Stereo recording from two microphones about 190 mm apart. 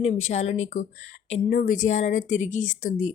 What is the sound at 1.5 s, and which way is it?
A woman's voice, 45° left (ahead or behind).